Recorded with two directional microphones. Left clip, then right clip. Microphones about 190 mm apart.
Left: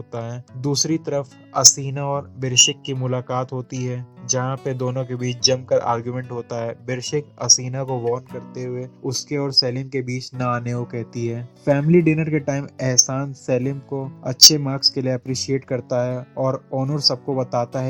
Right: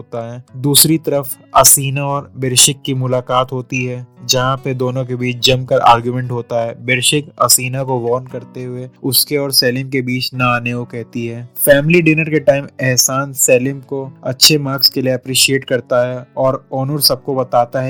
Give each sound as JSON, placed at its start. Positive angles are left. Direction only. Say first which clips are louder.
{"t": 0.1, "sound": "speech", "louder": "right 7 dB", "side_deg": -40}